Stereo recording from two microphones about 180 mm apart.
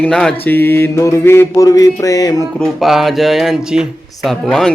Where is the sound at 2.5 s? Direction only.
Centre (ahead or behind).